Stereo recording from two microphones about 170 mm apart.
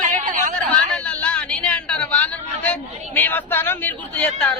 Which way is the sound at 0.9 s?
5° left (ahead or behind).